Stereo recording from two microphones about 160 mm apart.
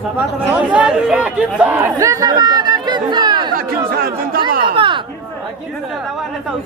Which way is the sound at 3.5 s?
70° right (ahead or behind).